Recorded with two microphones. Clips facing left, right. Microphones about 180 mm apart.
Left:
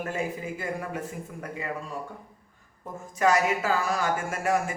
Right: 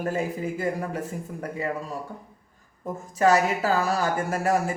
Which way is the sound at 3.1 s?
35° right (ahead or behind).